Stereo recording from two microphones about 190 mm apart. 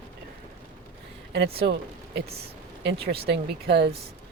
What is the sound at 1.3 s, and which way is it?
Speech, 55° right (ahead or behind).